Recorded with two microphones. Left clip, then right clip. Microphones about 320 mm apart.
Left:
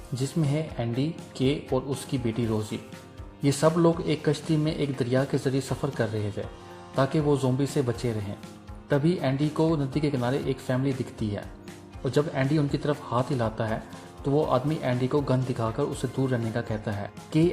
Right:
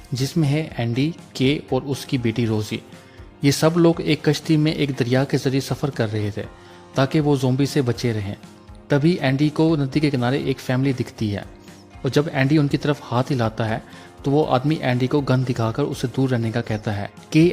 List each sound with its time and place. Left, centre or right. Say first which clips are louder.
0.1 s a man's voice: right 6 dB; right